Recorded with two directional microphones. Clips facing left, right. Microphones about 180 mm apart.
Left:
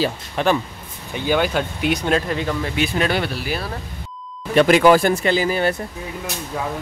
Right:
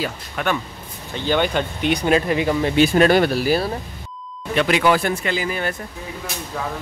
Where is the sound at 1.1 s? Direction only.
10° left (ahead or behind); by 2.5 s 10° right (ahead or behind).